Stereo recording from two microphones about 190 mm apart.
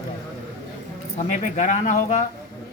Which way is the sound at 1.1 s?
40° left (ahead or behind).